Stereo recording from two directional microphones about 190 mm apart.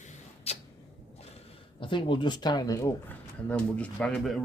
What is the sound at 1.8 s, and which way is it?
Speech, 25° left (ahead or behind).